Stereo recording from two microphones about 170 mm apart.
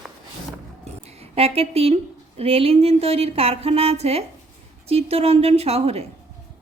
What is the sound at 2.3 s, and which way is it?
A woman's voice, 35° right (ahead or behind).